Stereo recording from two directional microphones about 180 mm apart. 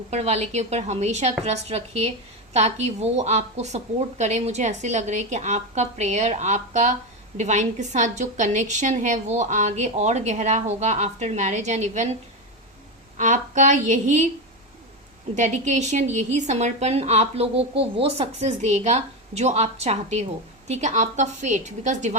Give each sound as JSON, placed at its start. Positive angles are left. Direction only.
{"t": 0.1, "sound": "a woman's voice", "side_deg": -35}
{"t": 13.1, "sound": "a woman's voice", "side_deg": -40}
{"t": 15.4, "sound": "a woman's voice", "side_deg": -40}